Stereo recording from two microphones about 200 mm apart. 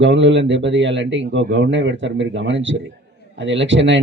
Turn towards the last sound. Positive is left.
turn(degrees=-70)  # may be behind; listen again after turning